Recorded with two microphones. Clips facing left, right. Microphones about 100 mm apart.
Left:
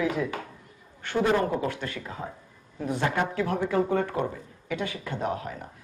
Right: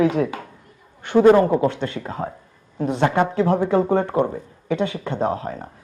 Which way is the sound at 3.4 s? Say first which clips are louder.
Right 7 dB; 25° right (ahead or behind).